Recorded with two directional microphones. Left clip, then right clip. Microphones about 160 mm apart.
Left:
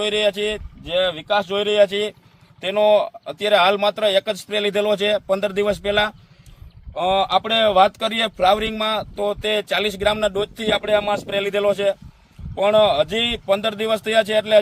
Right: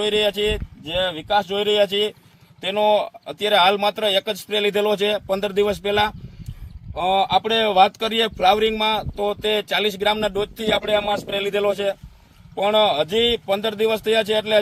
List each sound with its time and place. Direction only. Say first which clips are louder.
0.9 s speech: left 2 dB; 20° left (ahead or behind)